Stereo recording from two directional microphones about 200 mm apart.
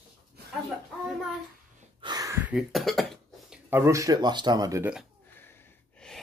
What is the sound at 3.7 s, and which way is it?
Speech, 15° right (ahead or behind).